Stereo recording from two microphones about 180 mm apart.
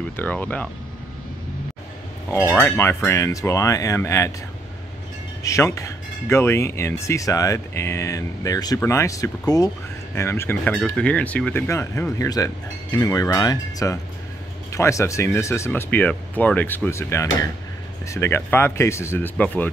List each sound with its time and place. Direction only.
0.2 s speech: 10° left (ahead or behind)
2.3 s speech: 15° left (ahead or behind)
5.4 s speech: 15° left (ahead or behind)